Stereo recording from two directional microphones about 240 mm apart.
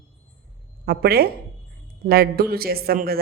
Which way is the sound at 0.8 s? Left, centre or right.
Right.